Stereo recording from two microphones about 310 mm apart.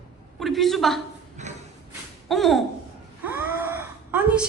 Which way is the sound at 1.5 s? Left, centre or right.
Right.